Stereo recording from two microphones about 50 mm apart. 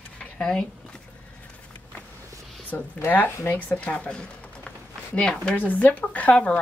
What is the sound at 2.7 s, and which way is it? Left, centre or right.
A woman's voice, left.